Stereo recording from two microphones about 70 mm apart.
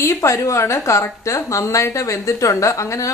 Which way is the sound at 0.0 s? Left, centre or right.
Left.